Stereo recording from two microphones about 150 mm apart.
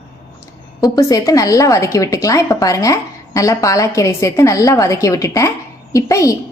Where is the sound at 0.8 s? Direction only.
25° left (ahead or behind).